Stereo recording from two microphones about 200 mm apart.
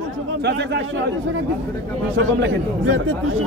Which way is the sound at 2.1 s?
70° right (ahead or behind).